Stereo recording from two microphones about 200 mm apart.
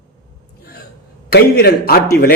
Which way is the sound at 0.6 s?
50° left (ahead or behind).